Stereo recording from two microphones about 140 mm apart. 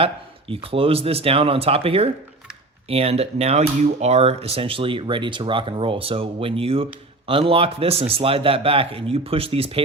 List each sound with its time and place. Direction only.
0.0 s speech: 40° right (ahead or behind)